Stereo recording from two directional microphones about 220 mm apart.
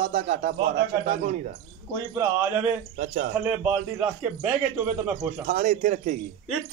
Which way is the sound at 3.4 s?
5° right (ahead or behind).